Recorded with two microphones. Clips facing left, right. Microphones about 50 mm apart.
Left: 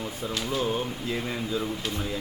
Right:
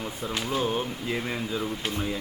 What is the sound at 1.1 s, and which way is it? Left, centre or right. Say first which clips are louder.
Speech: even; centre.